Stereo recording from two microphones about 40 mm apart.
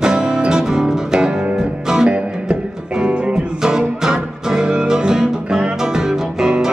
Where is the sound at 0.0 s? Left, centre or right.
Centre.